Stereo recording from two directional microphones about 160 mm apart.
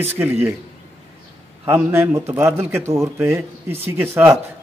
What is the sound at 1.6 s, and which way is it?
A man's voice, 15° right (ahead or behind).